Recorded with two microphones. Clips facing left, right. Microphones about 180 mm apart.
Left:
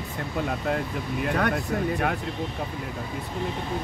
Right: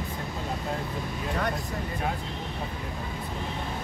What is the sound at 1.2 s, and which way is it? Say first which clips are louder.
Speech: left 5 dB; 65° left (ahead or behind).